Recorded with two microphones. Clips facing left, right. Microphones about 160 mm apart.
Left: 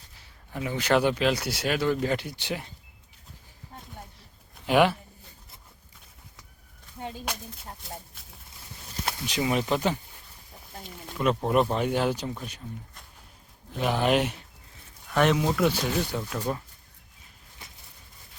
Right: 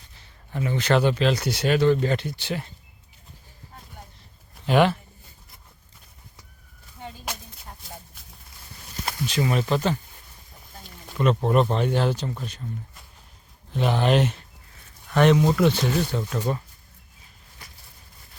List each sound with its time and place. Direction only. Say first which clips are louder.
0.2 s speech: right 4 dB; 5° left (ahead or behind)
4.6 s speech: right 2 dB; 10° left (ahead or behind)
7.3 s a sound: left 1 dB; centre (ahead or behind)
9.2 s speech: right 3 dB; 15° left (ahead or behind)
11.1 s speech: right 3 dB; centre (ahead or behind)
13.7 s speech: right 2 dB; 5° left (ahead or behind)
17.6 s a sound: even; 20° left (ahead or behind)